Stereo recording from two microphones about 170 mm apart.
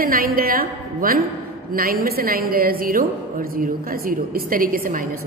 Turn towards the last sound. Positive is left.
turn(degrees=-55)  # may be behind; listen again after turning